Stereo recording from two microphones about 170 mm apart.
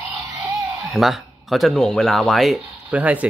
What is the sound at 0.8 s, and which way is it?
Speech, centre (ahead or behind).